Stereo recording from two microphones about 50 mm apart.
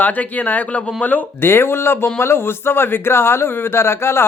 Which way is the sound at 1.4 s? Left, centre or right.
Left.